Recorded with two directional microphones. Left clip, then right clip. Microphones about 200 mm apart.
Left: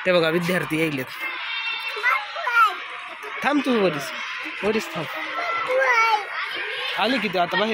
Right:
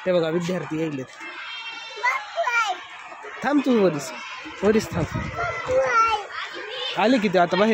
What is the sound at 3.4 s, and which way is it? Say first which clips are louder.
Speech: left 1 dB; 25° right (ahead or behind).